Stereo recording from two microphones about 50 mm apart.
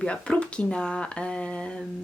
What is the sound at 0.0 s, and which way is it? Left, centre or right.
Speech, centre.